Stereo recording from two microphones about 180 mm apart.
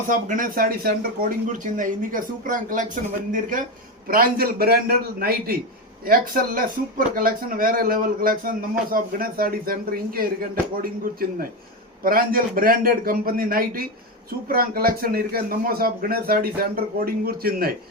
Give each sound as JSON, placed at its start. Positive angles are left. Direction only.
{"t": 0.1, "sound": "a man's voice", "side_deg": -45}